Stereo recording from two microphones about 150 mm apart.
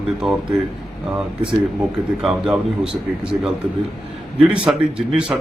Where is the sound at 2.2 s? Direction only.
Centre (ahead or behind).